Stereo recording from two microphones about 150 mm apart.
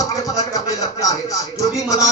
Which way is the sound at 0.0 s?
25° left (ahead or behind).